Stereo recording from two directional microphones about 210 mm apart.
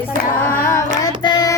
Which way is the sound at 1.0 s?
20° left (ahead or behind).